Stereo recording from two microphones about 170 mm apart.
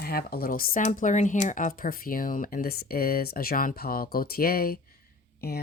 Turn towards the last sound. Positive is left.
turn(degrees=65)  # may be behind; listen again after turning